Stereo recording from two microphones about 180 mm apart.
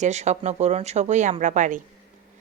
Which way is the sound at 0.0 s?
40° right (ahead or behind).